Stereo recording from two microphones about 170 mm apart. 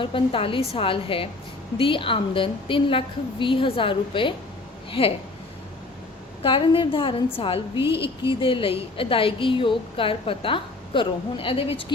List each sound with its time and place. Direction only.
0.0 s a woman's voice: 30° left (ahead or behind)
6.4 s a woman's voice: 30° left (ahead or behind)
7.8 s a woman's voice: 15° right (ahead or behind)
8.3 s a woman's voice: 30° left (ahead or behind)